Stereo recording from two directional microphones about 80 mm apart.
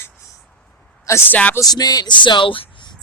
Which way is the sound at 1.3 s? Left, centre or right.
Centre.